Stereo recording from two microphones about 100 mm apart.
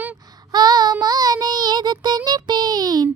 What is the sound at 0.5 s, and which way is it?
Child singing, 45° right (ahead or behind).